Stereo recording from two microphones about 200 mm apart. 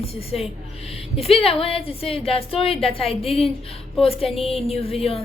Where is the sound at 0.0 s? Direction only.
30° left (ahead or behind).